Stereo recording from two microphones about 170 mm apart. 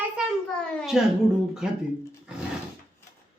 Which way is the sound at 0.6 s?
5° left (ahead or behind).